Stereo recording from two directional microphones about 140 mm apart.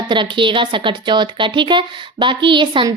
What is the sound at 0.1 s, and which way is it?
Speech, 35° right (ahead or behind).